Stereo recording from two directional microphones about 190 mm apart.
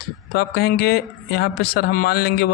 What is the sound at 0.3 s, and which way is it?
A man's voice, 55° left (ahead or behind).